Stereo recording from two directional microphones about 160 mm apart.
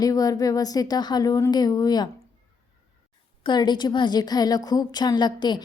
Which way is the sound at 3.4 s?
30° left (ahead or behind).